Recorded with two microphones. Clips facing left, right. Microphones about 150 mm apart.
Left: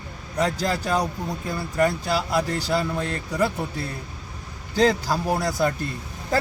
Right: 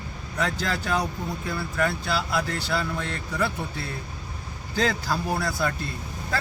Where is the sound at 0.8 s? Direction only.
35° left (ahead or behind).